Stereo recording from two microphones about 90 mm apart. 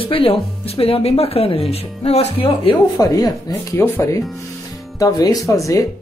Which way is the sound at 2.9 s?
45° left (ahead or behind).